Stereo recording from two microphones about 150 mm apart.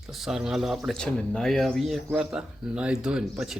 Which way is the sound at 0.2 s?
5° right (ahead or behind).